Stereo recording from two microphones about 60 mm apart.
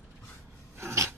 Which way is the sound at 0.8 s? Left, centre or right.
Right.